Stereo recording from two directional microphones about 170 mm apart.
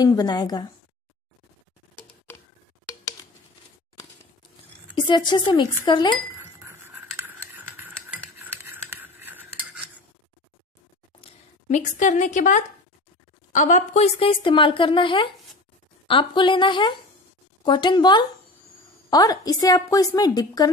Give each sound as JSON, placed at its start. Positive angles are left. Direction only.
{"t": 0.0, "sound": "a woman's voice", "side_deg": 25}
{"t": 4.9, "sound": "a woman's voice", "side_deg": 25}
{"t": 6.6, "sound": "scissors", "side_deg": -15}
{"t": 11.1, "sound": "a woman's voice", "side_deg": 40}